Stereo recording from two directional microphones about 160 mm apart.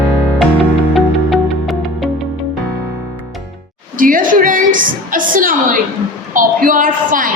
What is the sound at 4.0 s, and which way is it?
Music, 60° right (ahead or behind).